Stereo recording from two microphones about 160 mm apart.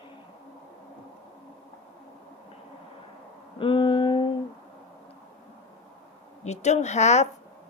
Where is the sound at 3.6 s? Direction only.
30° left (ahead or behind).